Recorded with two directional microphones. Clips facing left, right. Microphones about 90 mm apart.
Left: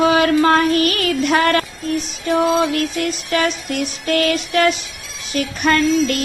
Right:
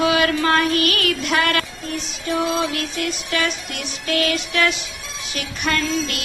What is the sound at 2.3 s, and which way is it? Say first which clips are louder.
Music: left 5 dB; 45° left (ahead or behind).